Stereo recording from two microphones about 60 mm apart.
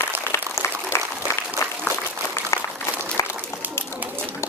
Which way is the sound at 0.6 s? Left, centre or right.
Left.